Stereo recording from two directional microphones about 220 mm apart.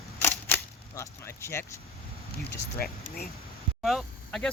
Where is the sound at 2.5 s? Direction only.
45° left (ahead or behind).